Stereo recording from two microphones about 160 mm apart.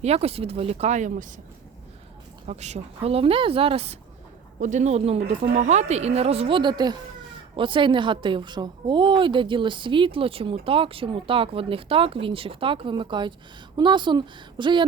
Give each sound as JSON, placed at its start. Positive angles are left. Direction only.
{"t": 0.0, "sound": "a woman's voice", "side_deg": -40}
{"t": 2.5, "sound": "a woman's voice", "side_deg": -45}
{"t": 4.6, "sound": "a woman's voice", "side_deg": -50}